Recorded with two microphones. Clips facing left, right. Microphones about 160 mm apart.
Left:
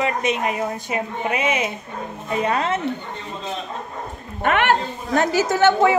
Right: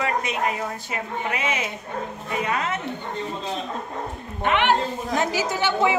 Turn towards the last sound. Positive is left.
turn(degrees=45)  # may be behind; listen again after turning